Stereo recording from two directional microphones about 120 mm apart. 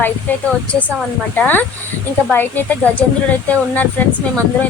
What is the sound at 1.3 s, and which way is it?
Speech, 15° left (ahead or behind).